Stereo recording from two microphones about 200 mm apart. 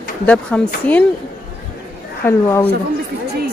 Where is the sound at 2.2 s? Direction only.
15° left (ahead or behind).